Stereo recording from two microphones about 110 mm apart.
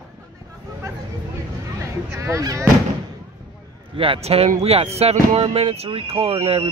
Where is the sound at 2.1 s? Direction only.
30° right (ahead or behind).